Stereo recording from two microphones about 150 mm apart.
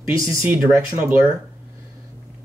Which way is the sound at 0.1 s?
20° right (ahead or behind).